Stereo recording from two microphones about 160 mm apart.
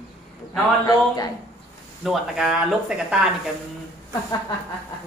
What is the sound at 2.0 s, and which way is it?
Speech, centre (ahead or behind).